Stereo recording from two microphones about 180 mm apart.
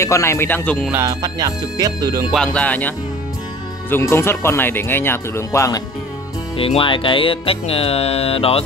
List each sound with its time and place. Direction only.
0.0 s speech: 15° left (ahead or behind)
1.0 s music: 20° right (ahead or behind)
2.3 s speech: 5° left (ahead or behind)
3.9 s speech: 15° left (ahead or behind)
6.5 s music: 30° left (ahead or behind)